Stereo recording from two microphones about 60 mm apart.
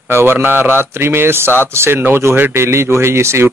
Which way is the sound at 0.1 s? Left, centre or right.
Right.